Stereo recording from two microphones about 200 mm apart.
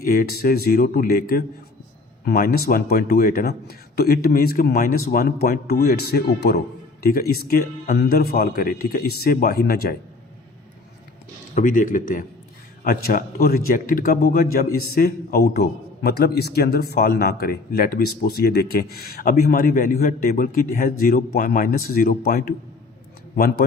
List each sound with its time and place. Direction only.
0.0 s a man's voice: 45° left (ahead or behind)
11.5 s a man's voice: 40° left (ahead or behind)